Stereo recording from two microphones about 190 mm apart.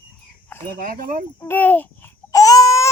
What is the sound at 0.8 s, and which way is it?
Speech, 50° right (ahead or behind).